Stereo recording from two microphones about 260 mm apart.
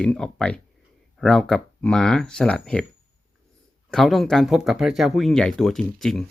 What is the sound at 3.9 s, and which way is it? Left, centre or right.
Speech, centre.